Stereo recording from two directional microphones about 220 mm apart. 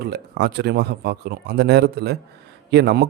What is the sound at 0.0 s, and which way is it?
Speech, 50° right (ahead or behind).